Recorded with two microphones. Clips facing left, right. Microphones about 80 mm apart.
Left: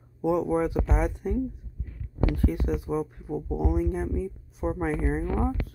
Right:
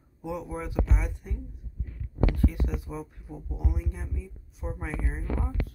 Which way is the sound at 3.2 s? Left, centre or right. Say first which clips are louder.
Left 10 dB; left.